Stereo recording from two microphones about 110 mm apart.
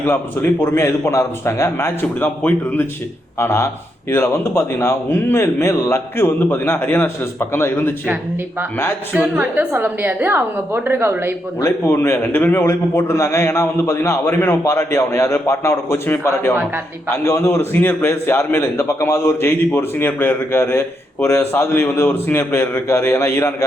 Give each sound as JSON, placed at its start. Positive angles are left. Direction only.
{"t": 0.6, "sound": "a man's voice", "side_deg": 20}
{"t": 8.0, "sound": "a woman's voice", "side_deg": -15}
{"t": 11.6, "sound": "a man's voice", "side_deg": 25}